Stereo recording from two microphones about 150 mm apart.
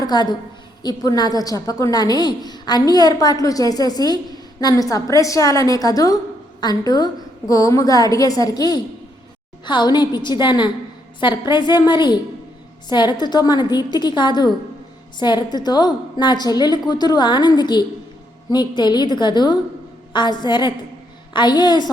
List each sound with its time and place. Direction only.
0.0 s a woman's voice: 30° left (ahead or behind)